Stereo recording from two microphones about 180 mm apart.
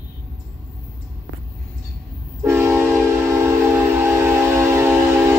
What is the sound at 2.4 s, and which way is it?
Train, 10° right (ahead or behind).